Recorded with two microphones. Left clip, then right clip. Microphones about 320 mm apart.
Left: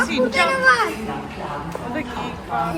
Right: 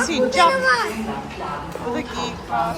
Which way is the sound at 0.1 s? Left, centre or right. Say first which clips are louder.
Right 1 dB; centre.